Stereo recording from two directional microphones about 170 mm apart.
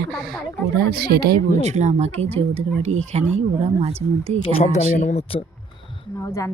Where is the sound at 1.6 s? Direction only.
45° right (ahead or behind).